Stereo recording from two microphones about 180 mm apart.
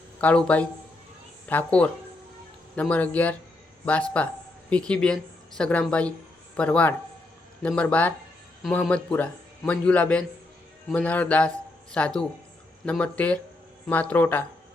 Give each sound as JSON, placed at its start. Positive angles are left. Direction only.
{"t": 0.2, "sound": "a man's voice", "side_deg": 5}